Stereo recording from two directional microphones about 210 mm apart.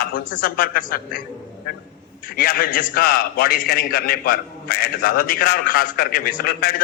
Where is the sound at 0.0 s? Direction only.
40° left (ahead or behind).